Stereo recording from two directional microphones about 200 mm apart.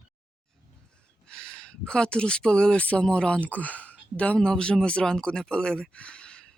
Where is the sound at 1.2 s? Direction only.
5° left (ahead or behind).